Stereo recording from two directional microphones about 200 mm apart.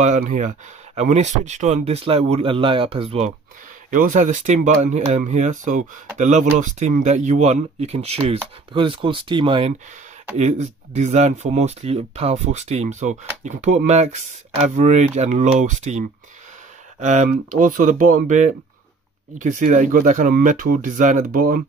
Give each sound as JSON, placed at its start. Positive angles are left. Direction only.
{"t": 0.0, "sound": "speech", "side_deg": -40}
{"t": 11.0, "sound": "speech", "side_deg": -35}
{"t": 17.0, "sound": "speech", "side_deg": -35}